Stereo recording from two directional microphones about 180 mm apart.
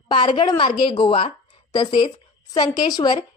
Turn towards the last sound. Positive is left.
turn(degrees=25)  # may be behind; listen again after turning